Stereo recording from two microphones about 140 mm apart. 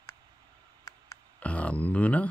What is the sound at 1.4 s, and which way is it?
Speech, 10° left (ahead or behind).